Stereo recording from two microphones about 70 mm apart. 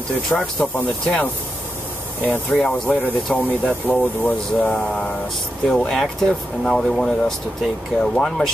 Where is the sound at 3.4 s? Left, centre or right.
Left.